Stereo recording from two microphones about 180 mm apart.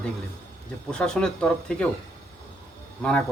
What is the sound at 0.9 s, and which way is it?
Speech, 5° left (ahead or behind).